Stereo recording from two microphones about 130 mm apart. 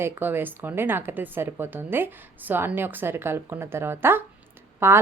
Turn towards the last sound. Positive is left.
turn(degrees=-20)  # may be behind; listen again after turning